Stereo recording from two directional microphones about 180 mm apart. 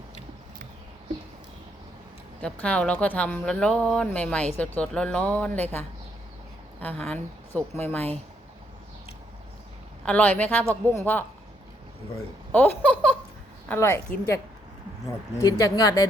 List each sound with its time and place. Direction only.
2.4 s speech: 5° left (ahead or behind)
6.7 s a woman's voice: 5° left (ahead or behind)
10.1 s speech: 10° left (ahead or behind)
12.5 s speech: 10° left (ahead or behind)
15.4 s speech: 20° left (ahead or behind)